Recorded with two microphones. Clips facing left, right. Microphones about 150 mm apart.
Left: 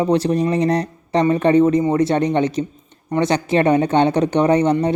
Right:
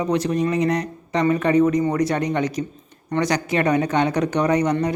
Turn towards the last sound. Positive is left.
turn(degrees=30)  # may be behind; listen again after turning